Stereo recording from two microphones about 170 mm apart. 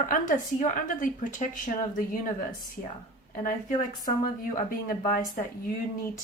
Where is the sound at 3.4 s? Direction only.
55° left (ahead or behind).